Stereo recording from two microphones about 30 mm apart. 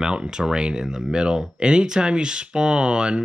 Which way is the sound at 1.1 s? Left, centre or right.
Right.